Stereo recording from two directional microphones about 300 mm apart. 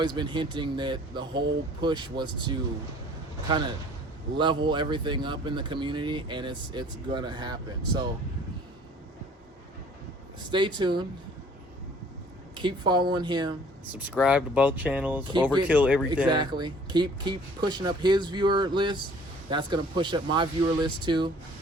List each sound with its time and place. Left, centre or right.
0.0 s speech: centre
4.4 s speech: centre
10.5 s speech: centre
12.5 s speech: centre
15.2 s speech: centre
15.5 s speech: centre